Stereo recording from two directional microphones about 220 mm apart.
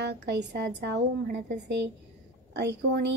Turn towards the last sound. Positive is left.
turn(degrees=-50)  # may be behind; listen again after turning